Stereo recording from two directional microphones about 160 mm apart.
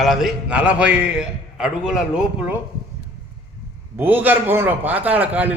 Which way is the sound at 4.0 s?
10° right (ahead or behind).